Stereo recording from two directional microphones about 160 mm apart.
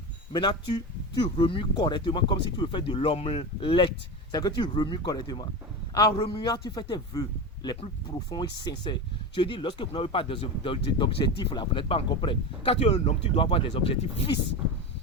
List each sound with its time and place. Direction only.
0.3 s speech: 30° left (ahead or behind)